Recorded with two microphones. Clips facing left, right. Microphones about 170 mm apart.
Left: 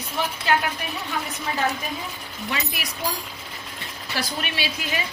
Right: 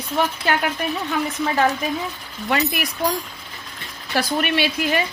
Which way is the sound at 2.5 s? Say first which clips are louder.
Right 9 dB; 60° right (ahead or behind).